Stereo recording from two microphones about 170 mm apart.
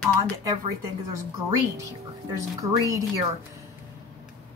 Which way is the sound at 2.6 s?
20° right (ahead or behind).